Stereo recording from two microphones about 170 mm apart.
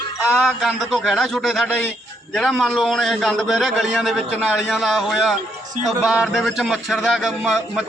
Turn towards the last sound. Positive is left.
turn(degrees=-5)  # may be behind; listen again after turning